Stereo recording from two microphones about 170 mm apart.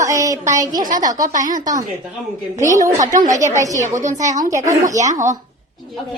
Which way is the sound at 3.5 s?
20° right (ahead or behind).